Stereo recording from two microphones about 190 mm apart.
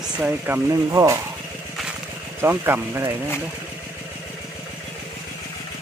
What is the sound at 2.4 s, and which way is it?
Speech, 10° right (ahead or behind).